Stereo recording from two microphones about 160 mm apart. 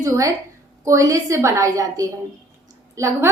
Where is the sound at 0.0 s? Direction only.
20° right (ahead or behind).